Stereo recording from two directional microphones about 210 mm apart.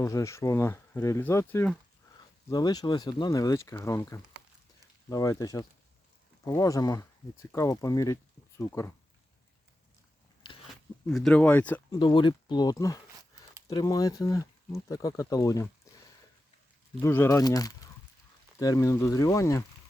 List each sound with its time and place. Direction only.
0.0 s speech: 15° left (ahead or behind)
2.5 s speech: 20° left (ahead or behind)
11.0 s speech: 5° left (ahead or behind)
11.9 s speech: 20° left (ahead or behind)
17.0 s speech: 15° left (ahead or behind)